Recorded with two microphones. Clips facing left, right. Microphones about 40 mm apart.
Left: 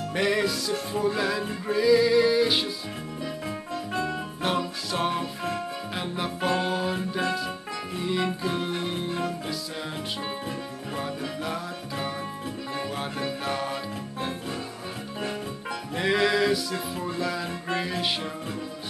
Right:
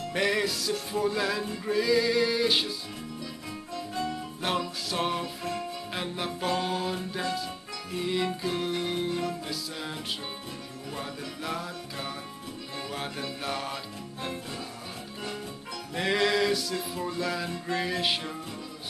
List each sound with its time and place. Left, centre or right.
0.1 s music: centre
3.4 s music: left
4.4 s music: centre
13.4 s music: centre
15.9 s music: centre